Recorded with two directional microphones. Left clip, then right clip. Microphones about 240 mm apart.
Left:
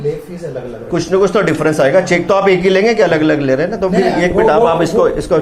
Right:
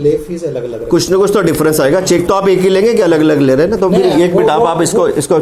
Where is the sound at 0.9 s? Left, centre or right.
Right.